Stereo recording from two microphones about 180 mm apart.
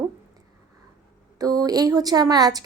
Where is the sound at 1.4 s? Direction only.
20° right (ahead or behind).